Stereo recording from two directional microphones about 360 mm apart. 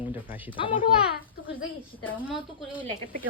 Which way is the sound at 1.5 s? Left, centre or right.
Left.